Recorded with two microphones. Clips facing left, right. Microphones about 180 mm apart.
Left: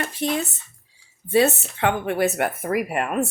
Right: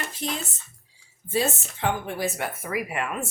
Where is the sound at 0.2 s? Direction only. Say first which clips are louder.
Left 8 dB; 60° left (ahead or behind).